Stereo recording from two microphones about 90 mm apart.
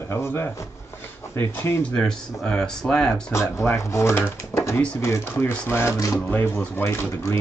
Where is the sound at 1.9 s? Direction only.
5° left (ahead or behind).